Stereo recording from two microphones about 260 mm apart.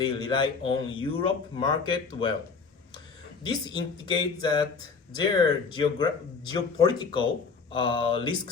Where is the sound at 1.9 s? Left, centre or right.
Centre.